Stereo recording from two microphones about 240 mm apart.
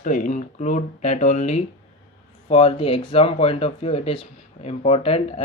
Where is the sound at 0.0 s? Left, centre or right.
Left.